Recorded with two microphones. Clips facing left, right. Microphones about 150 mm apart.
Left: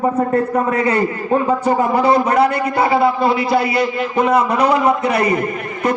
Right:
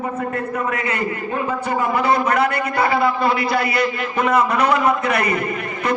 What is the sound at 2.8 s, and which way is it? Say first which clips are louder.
A man's voice: left 3 dB; 25° left (ahead or behind).